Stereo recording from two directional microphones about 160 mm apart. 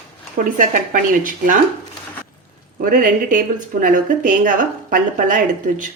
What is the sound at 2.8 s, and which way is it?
Speech, 60° right (ahead or behind).